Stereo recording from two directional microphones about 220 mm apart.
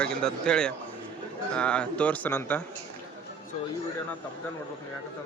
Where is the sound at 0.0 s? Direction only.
5° left (ahead or behind).